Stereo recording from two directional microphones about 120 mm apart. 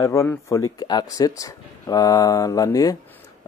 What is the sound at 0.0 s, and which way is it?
Speech, 25° left (ahead or behind).